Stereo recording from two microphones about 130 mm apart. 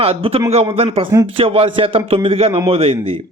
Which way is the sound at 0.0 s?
50° right (ahead or behind).